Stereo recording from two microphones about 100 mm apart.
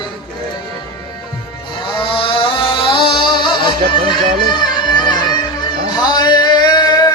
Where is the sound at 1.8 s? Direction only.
55° left (ahead or behind).